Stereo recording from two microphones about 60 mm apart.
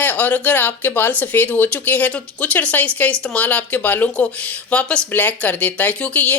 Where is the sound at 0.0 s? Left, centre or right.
Left.